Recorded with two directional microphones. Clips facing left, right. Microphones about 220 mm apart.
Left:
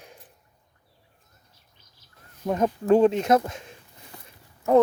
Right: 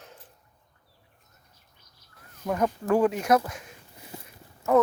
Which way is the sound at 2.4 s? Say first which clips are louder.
Left 4 dB; 25° left (ahead or behind).